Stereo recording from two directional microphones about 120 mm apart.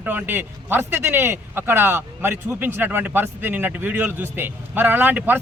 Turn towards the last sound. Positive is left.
turn(degrees=-15)  # may be behind; listen again after turning